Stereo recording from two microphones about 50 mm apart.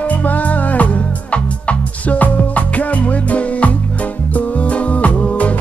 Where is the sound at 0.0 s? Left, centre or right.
Left.